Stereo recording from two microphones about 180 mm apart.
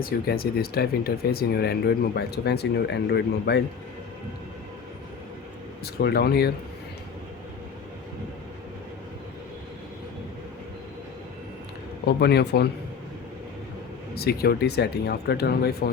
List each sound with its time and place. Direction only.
0.0 s speech: 60° left (ahead or behind)
5.8 s speech: 60° left (ahead or behind)
12.0 s speech: 65° left (ahead or behind)
14.2 s speech: 60° left (ahead or behind)